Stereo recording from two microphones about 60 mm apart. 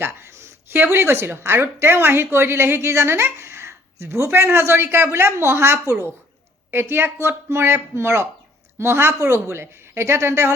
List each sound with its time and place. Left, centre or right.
0.0 s a woman's voice: right